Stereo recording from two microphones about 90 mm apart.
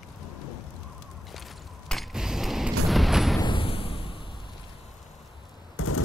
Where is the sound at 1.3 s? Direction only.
Centre (ahead or behind).